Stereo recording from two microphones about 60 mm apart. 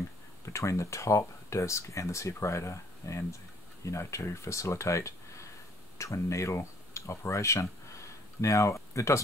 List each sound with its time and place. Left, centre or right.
0.5 s speech: left